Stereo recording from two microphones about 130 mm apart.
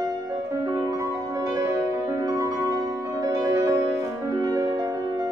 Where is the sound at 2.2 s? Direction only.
25° right (ahead or behind).